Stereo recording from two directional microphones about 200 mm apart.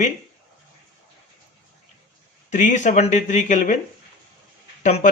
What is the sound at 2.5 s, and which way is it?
Speech, 35° left (ahead or behind).